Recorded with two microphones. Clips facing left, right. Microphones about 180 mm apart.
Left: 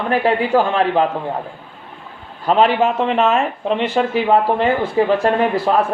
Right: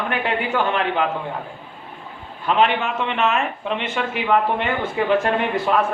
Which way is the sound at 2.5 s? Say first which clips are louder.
Left 5 dB; 35° left (ahead or behind).